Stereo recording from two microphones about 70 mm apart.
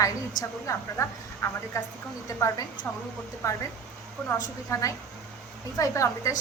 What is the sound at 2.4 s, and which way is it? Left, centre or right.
A woman's voice, left.